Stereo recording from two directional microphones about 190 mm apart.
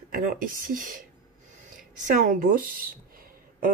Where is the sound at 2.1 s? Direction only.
45° right (ahead or behind).